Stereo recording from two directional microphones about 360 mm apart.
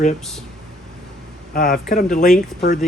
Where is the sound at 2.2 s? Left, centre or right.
Centre.